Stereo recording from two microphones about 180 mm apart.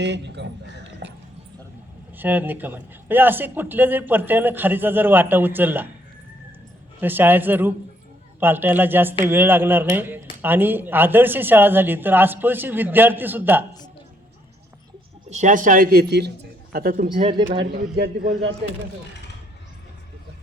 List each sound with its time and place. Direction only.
0.0 s a sound: 75° right (ahead or behind)
2.1 s a man's voice: 10° right (ahead or behind)
7.0 s a man's voice: 10° right (ahead or behind)
15.3 s a man's voice: 40° right (ahead or behind)
17.1 s speech: 30° right (ahead or behind)
17.9 s a man's voice: 60° right (ahead or behind)